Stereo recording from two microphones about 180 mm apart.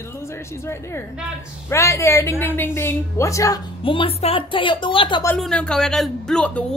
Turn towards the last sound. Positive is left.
turn(degrees=5)  # may be behind; listen again after turning